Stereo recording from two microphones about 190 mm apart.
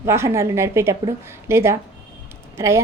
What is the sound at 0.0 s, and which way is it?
A woman's voice, 15° right (ahead or behind).